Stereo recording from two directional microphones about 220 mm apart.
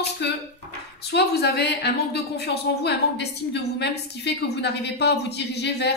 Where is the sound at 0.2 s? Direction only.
50° left (ahead or behind).